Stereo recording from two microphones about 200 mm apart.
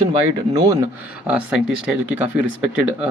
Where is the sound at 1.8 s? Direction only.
10° right (ahead or behind).